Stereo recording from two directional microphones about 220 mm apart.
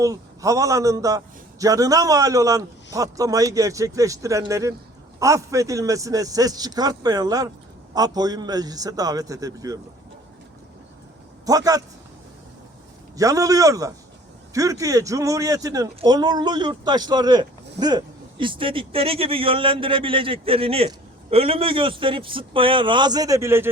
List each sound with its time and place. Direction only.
0.0 s a man's voice: 15° right (ahead or behind)
11.4 s a man's voice: 15° right (ahead or behind)
13.1 s a man's voice: 15° right (ahead or behind)